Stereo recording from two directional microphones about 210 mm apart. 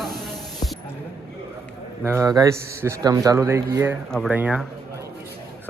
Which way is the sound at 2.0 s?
10° right (ahead or behind).